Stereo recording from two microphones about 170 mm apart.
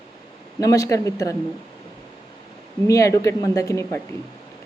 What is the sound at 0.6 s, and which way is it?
Speech, 20° left (ahead or behind).